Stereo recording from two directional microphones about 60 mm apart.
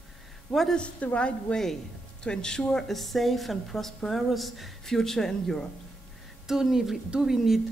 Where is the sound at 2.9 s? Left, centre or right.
Centre.